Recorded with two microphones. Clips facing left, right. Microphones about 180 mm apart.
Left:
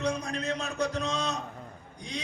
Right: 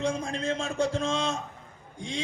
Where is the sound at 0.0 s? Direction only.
25° right (ahead or behind).